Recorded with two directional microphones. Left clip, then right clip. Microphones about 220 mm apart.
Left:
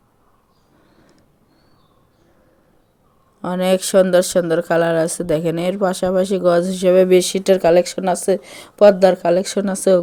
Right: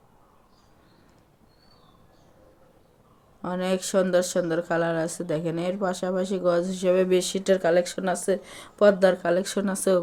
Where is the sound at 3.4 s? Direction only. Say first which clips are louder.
Left 10 dB; 35° left (ahead or behind).